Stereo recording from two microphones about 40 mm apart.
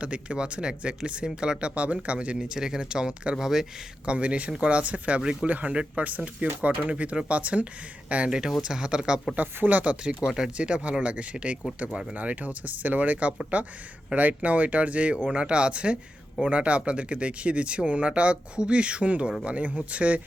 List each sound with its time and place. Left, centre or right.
0.0 s speech: right
1.7 s speech: right; by 3.3 s centre
3.3 s speech: centre
4.0 s speech: right
5.2 s speech: centre
5.5 s speech: right
8.6 s speech: right
9.6 s speech: right
9.9 s speech: right
10.6 s speech: right